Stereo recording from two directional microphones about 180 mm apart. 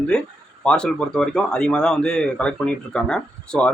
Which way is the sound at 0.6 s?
5° left (ahead or behind).